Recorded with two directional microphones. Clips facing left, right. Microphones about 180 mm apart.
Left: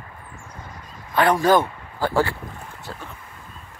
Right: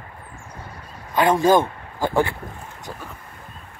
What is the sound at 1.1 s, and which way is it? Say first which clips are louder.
Speech: right 1 dB; 20° right (ahead or behind).